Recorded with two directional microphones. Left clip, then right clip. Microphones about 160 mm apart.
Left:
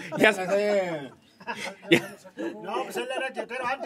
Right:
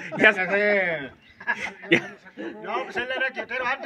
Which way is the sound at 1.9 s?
10° left (ahead or behind).